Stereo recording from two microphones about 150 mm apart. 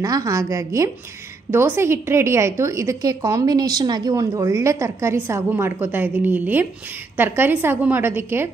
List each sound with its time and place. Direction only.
0.0 s a woman's voice: 20° right (ahead or behind)